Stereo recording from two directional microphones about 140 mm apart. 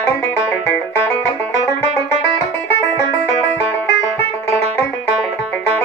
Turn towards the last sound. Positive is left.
turn(degrees=20)  # may be behind; listen again after turning